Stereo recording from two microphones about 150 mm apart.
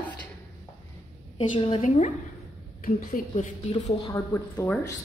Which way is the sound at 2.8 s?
70° left (ahead or behind).